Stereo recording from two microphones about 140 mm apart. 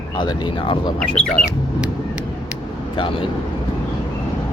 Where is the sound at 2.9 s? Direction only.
40° left (ahead or behind).